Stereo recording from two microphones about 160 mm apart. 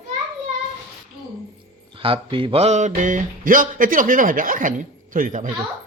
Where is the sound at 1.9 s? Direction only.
35° right (ahead or behind); by 5.5 s 55° right (ahead or behind).